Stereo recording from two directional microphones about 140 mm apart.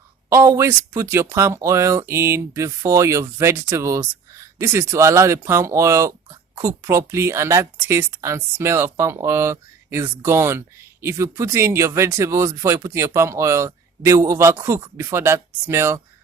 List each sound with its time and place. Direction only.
0.3 s speech: 20° right (ahead or behind)